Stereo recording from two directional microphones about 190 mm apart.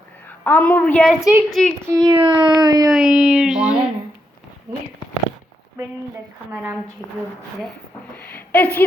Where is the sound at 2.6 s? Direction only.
20° right (ahead or behind).